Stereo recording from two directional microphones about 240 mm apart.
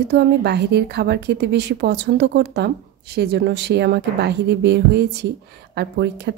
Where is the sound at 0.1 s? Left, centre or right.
Right.